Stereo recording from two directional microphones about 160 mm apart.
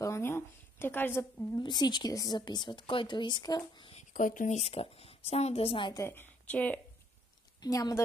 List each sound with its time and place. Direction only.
0.0 s a sound: 15° left (ahead or behind)
1.6 s a woman's voice: 25° left (ahead or behind)
3.9 s a woman's voice: 55° left (ahead or behind); by 5.9 s 35° left (ahead or behind)
5.9 s a woman's voice: 15° left (ahead or behind)
7.6 s a woman's voice: 20° left (ahead or behind)